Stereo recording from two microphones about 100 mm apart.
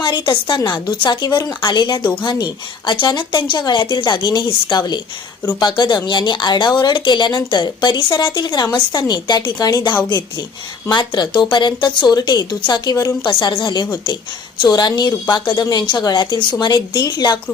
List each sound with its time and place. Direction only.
0.0 s speech: 50° left (ahead or behind)
13.2 s speech: 55° left (ahead or behind)